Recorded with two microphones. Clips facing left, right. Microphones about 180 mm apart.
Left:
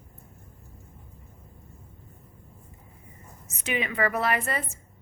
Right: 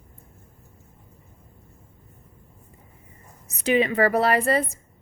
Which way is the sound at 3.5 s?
35° right (ahead or behind).